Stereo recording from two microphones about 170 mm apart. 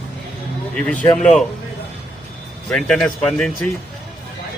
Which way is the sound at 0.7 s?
5° left (ahead or behind).